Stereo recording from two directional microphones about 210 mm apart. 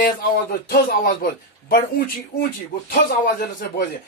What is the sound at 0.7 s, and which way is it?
Speech, 45° left (ahead or behind).